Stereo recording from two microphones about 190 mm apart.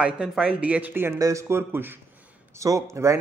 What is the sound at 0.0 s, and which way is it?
A man's voice, 5° right (ahead or behind).